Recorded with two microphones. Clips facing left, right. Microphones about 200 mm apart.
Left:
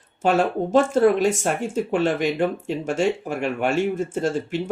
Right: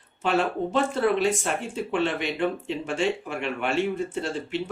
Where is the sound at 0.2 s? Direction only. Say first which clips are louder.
Left 4 dB; 45° left (ahead or behind).